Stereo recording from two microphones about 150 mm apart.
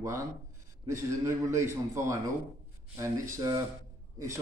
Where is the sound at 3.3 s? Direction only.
25° right (ahead or behind).